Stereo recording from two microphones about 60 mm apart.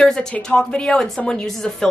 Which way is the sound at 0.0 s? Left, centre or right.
Centre.